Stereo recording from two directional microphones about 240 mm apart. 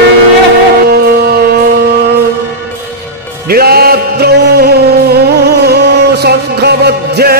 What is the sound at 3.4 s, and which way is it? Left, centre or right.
Music, right.